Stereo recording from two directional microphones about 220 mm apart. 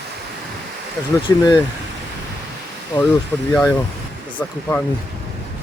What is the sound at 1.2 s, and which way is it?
Speech, 20° left (ahead or behind).